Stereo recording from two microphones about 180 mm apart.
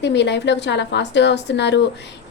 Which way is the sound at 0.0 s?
70° left (ahead or behind).